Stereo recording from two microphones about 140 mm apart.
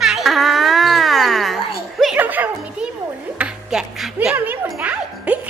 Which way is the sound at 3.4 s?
5° right (ahead or behind).